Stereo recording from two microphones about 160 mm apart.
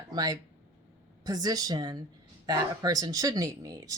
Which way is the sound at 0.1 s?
25° right (ahead or behind).